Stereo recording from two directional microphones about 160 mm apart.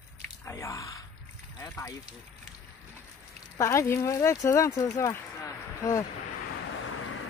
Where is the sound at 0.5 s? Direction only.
20° left (ahead or behind).